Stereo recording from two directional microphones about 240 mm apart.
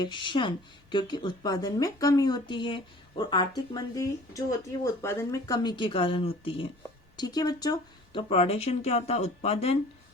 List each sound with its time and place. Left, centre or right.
0.0 s speech: centre